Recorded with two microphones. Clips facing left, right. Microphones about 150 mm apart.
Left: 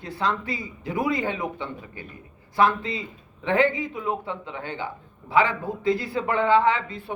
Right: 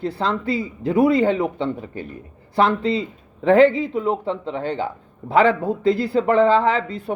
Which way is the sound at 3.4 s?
35° right (ahead or behind).